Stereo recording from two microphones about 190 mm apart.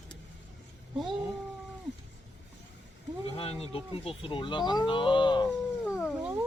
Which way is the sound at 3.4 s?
30° left (ahead or behind).